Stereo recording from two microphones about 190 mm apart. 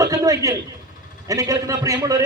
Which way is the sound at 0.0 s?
15° right (ahead or behind).